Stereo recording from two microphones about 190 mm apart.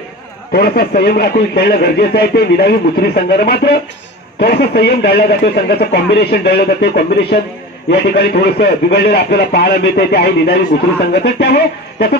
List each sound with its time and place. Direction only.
0.5 s speech: 55° left (ahead or behind)